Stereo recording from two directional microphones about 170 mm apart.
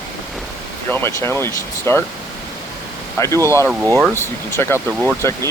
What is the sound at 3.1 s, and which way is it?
Speech, 15° left (ahead or behind).